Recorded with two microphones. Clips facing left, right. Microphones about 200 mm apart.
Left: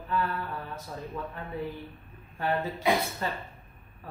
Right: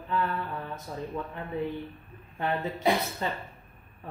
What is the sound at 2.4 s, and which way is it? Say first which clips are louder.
Speech: left 1 dB; 20° right (ahead or behind).